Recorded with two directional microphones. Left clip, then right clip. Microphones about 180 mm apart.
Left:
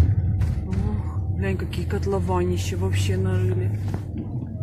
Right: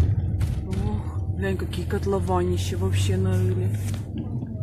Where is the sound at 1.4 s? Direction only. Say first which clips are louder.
Right 1 dB; 5° right (ahead or behind).